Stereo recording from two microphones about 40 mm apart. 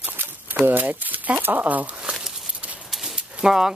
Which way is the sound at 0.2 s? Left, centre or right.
Right.